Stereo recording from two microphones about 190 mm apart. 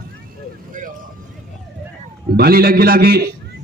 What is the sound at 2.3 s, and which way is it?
Speech, 55° right (ahead or behind).